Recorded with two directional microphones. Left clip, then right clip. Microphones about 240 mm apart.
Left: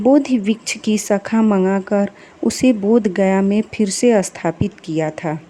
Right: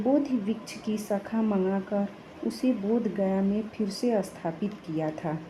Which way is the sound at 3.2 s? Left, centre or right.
Left.